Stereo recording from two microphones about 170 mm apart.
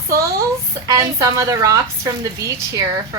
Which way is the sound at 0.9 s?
20° right (ahead or behind).